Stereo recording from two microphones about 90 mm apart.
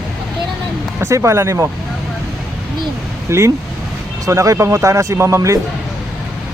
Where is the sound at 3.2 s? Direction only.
30° right (ahead or behind).